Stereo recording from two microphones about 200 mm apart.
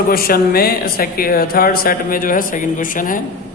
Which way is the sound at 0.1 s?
50° left (ahead or behind).